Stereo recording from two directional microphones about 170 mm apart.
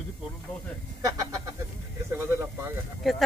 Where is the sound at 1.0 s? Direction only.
20° right (ahead or behind).